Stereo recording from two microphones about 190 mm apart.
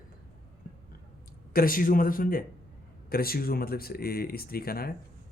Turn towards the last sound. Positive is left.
turn(degrees=50)  # may be behind; listen again after turning